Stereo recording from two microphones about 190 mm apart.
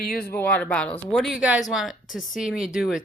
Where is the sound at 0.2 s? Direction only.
10° left (ahead or behind).